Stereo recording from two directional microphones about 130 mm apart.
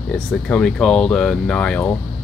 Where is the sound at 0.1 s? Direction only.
5° left (ahead or behind).